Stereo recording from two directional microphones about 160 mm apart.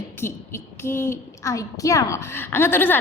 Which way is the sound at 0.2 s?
15° left (ahead or behind).